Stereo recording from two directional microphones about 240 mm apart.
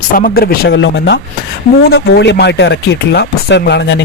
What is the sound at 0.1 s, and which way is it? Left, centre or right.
Speech, left.